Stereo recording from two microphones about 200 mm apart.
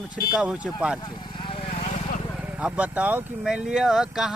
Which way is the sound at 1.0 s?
25° left (ahead or behind).